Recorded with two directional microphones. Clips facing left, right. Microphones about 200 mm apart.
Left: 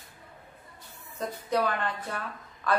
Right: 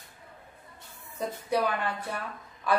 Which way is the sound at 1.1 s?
10° right (ahead or behind).